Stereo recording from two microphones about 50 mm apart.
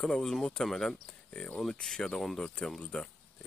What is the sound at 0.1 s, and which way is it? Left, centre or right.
Speech, centre.